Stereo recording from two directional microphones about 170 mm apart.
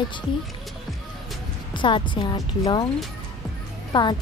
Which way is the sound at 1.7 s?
30° left (ahead or behind).